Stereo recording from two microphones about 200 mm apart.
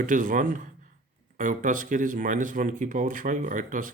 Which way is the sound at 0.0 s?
40° right (ahead or behind).